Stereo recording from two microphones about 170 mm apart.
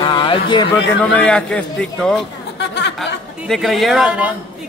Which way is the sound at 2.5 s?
90° left.